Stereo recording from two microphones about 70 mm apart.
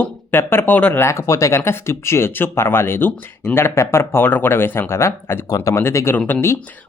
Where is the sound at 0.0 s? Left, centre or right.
Left.